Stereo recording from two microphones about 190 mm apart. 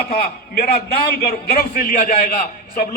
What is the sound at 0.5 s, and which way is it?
A man's voice, 50° left (ahead or behind).